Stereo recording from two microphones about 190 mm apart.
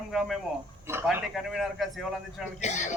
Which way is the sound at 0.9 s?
15° right (ahead or behind).